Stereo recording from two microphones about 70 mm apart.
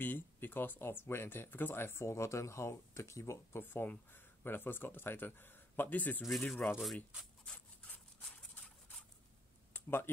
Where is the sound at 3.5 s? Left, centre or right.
Left.